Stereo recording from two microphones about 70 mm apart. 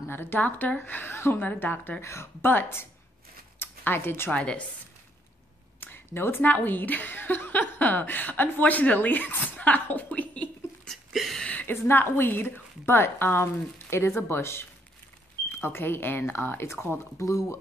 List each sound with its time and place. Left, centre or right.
0.1 s a woman's voice: left
3.5 s a sound: left
4.3 s a woman's voice: centre
5.8 s a woman's voice: left
10.9 s a sound: centre
11.6 s a woman's voice: left
17.2 s speech: left